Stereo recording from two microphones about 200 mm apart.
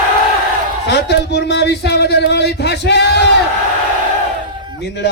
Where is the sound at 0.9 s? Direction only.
55° left (ahead or behind).